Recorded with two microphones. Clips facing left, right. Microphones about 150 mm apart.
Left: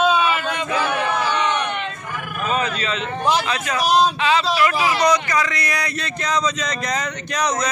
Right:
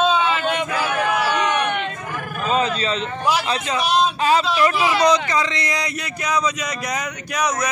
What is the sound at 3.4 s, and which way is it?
Speech, 25° right (ahead or behind).